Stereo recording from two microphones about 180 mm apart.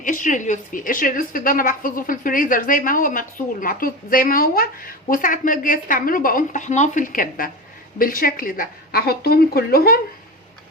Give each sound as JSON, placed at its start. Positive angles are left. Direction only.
{"t": 0.0, "sound": "a woman's voice", "side_deg": 45}